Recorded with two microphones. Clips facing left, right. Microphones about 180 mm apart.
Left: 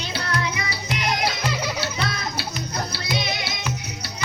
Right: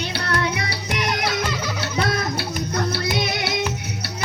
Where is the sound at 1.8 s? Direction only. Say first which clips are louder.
Right 4 dB; 55° right (ahead or behind).